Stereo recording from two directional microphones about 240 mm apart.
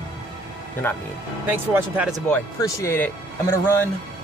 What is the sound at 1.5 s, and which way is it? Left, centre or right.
Speech, centre.